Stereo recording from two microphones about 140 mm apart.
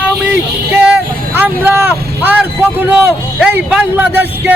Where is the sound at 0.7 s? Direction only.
10° right (ahead or behind).